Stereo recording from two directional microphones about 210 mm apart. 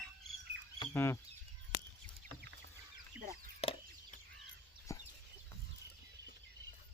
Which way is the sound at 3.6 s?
30° left (ahead or behind).